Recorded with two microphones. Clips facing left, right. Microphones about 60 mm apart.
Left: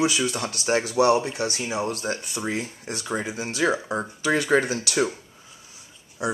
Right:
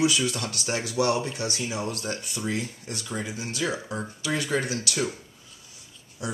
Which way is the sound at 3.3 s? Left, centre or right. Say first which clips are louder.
Left 7 dB; left.